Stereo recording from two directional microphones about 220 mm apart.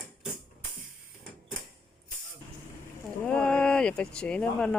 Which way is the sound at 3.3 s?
5° left (ahead or behind).